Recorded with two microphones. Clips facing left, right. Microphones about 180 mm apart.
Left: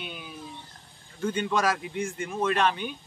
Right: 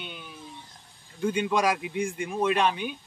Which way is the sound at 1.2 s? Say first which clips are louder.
Right 1 dB; 10° right (ahead or behind).